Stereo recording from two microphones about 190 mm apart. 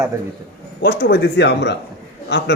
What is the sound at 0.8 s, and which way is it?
A man's voice, 55° left (ahead or behind).